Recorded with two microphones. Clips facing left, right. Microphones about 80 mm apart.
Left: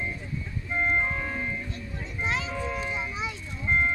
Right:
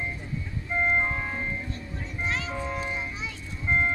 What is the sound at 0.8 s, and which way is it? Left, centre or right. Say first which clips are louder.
Organ: right 1 dB; centre.